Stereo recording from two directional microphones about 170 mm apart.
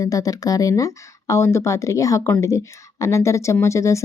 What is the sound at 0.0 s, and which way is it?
Speech, 20° left (ahead or behind).